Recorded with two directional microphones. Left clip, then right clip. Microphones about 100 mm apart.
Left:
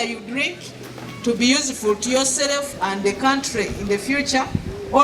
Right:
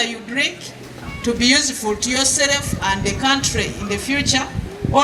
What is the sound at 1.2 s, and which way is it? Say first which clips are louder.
Speech: right 3 dB; 15° right (ahead or behind).